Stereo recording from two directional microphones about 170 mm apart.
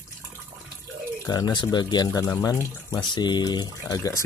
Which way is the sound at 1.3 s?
25° left (ahead or behind).